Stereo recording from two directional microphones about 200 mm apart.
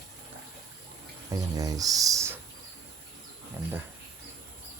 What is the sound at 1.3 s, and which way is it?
Speech, 15° right (ahead or behind).